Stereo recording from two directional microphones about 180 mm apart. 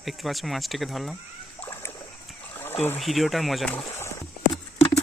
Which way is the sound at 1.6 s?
15° left (ahead or behind).